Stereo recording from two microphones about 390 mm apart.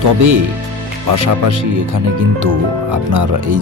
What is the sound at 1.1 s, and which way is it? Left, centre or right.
Speech, right.